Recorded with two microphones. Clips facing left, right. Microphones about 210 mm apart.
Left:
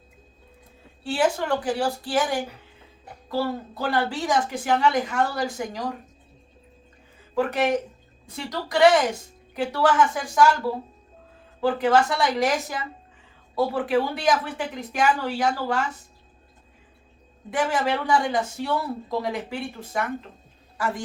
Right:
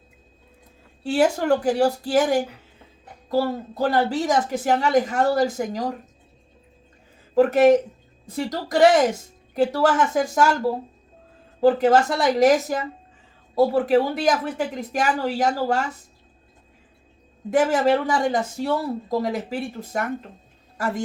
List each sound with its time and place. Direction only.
1.0 s a woman's voice: 40° right (ahead or behind)
7.3 s a woman's voice: 40° right (ahead or behind)
17.5 s a woman's voice: 40° right (ahead or behind)